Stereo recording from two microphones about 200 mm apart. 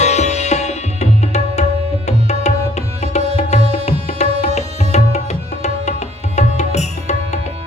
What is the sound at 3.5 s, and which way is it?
Music, 35° left (ahead or behind).